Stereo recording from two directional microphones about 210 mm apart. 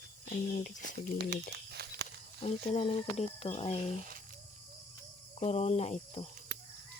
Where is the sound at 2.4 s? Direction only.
30° left (ahead or behind).